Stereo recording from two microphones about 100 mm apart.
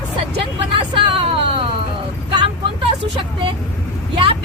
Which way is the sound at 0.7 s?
65° right (ahead or behind).